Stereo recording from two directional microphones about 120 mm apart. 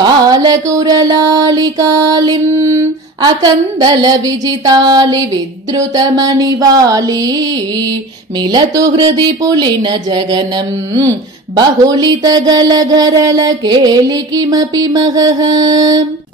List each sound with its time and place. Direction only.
0.0 s mantra: 35° right (ahead or behind)
8.5 s mantra: 35° right (ahead or behind)
11.5 s mantra: 35° right (ahead or behind)